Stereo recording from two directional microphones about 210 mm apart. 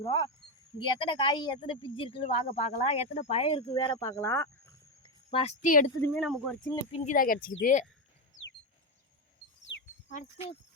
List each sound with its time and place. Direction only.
0.0 s speech: 20° left (ahead or behind)
5.3 s speech: 30° left (ahead or behind)
6.1 s speech: centre (ahead or behind)
6.9 s speech: 35° left (ahead or behind)
10.1 s speech: 30° left (ahead or behind)